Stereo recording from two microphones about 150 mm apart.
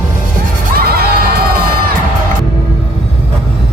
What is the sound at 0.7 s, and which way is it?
Crowd, 90° right.